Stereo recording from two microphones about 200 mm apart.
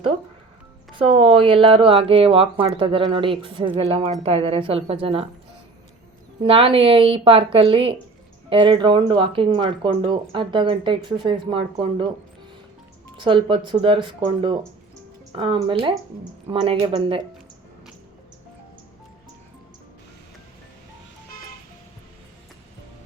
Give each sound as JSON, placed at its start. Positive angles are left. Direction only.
{"t": 0.9, "sound": "speech", "side_deg": -25}
{"t": 6.4, "sound": "speech", "side_deg": -25}
{"t": 13.1, "sound": "speech", "side_deg": -25}